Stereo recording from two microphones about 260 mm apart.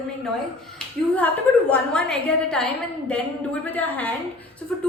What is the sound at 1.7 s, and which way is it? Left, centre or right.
A woman's voice, centre.